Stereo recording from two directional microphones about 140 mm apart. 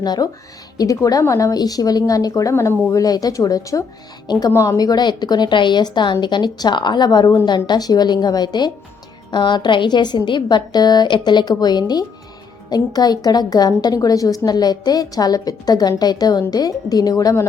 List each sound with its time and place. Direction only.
0.0 s a woman's voice: 30° left (ahead or behind)